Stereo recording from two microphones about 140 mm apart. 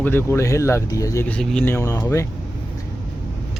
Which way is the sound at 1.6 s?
20° left (ahead or behind).